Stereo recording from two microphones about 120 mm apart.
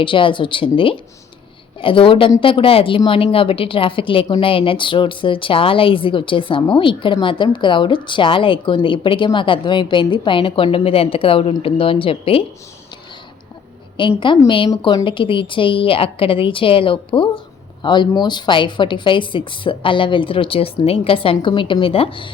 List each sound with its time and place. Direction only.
0.0 s a woman's voice: 45° left (ahead or behind)
14.2 s a woman's voice: 40° left (ahead or behind)